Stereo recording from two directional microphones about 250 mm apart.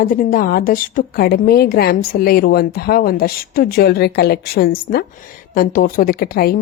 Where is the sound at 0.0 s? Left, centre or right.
Left.